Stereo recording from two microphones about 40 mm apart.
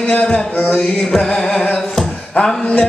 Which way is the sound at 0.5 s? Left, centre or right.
Left.